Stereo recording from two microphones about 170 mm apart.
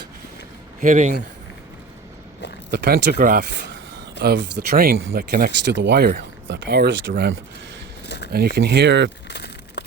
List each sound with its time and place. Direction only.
0.8 s speech: 45° right (ahead or behind)
2.6 s speech: 65° right (ahead or behind)
4.2 s speech: 80° right
8.0 s a sound: 85° left
8.3 s speech: 65° right (ahead or behind); by 9.0 s 85° right
9.3 s a sound: 80° left